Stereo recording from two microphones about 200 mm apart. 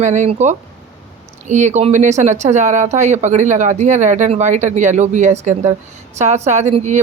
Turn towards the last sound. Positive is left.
turn(degrees=-35)  # may be behind; listen again after turning